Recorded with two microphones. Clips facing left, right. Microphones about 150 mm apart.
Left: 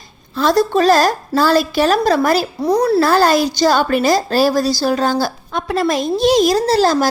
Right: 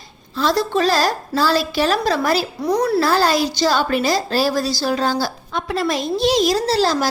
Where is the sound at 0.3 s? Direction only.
45° left (ahead or behind).